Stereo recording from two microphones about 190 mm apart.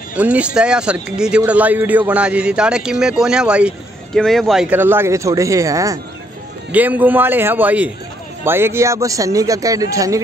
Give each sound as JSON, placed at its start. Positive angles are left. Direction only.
{"t": 0.1, "sound": "a man's voice", "side_deg": -5}